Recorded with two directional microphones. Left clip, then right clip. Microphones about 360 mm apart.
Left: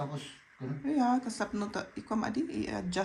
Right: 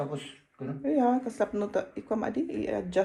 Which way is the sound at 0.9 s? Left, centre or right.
Centre.